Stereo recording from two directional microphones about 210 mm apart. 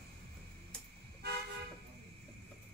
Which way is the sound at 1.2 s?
50° right (ahead or behind).